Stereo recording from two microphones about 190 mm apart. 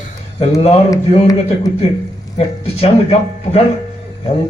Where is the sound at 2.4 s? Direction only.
30° left (ahead or behind).